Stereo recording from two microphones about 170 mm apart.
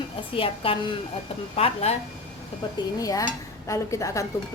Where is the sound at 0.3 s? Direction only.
30° left (ahead or behind).